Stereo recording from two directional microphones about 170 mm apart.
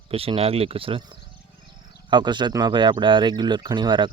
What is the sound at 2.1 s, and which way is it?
Speech, 25° right (ahead or behind).